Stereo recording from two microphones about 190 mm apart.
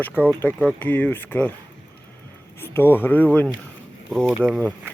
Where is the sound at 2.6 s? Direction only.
10° left (ahead or behind).